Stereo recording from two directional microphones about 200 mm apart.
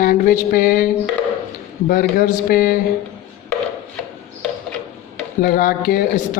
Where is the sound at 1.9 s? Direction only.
45° left (ahead or behind).